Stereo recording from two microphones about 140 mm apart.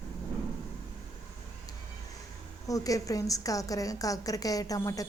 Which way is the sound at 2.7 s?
25° left (ahead or behind).